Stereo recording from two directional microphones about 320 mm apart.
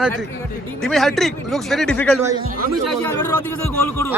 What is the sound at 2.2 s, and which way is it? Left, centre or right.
Speech, centre.